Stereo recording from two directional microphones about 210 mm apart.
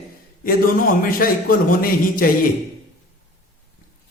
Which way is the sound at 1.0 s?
40° left (ahead or behind).